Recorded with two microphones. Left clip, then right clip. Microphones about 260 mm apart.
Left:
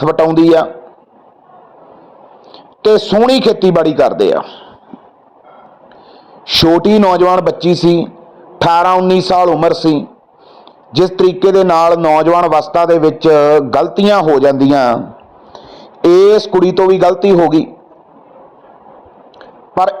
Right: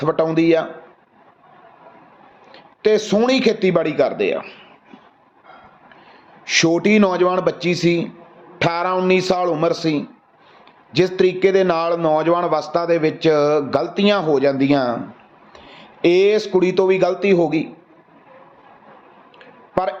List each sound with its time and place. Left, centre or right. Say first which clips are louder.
0.0 s a man's voice: left 8 dB; centre
2.9 s speech: left 8 dB; centre
3.6 s a man's voice: left 7 dB; left
6.5 s a man's voice: left 7 dB; centre
19.7 s a man's voice: left 8 dB; centre